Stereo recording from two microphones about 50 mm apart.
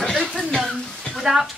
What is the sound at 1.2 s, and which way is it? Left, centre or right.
Speech, centre.